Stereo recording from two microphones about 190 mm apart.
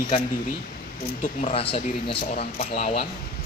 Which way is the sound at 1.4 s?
40° left (ahead or behind).